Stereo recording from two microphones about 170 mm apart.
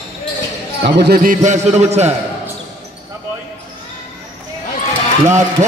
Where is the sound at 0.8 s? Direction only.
80° right.